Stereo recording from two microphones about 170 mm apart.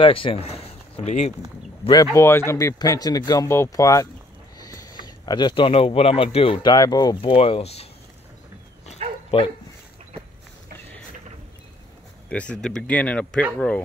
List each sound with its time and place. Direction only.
0.0 s speech: 30° left (ahead or behind)
2.1 s speech: 15° left (ahead or behind)
4.6 s a sound: 20° left (ahead or behind)
5.0 s speech: 25° left (ahead or behind)
9.0 s bow-wow: 40° right (ahead or behind)
12.3 s speech: 5° left (ahead or behind)